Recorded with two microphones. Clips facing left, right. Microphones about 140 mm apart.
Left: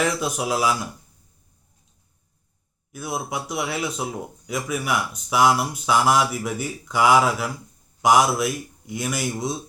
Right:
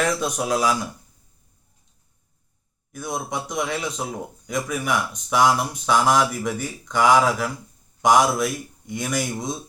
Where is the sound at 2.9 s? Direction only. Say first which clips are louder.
Even; 5° left (ahead or behind).